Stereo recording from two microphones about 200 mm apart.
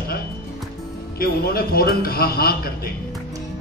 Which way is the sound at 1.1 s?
50° left (ahead or behind).